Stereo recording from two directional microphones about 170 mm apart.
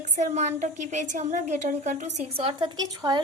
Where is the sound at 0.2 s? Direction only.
45° right (ahead or behind).